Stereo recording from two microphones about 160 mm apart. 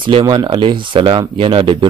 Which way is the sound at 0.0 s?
30° right (ahead or behind).